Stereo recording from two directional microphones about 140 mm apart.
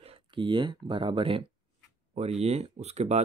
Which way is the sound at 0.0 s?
40° right (ahead or behind).